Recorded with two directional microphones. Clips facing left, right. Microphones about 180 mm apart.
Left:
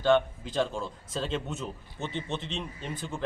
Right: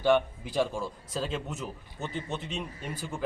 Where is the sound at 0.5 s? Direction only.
10° right (ahead or behind).